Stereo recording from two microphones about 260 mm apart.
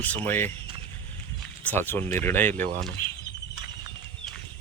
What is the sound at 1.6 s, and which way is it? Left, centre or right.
Speech, centre.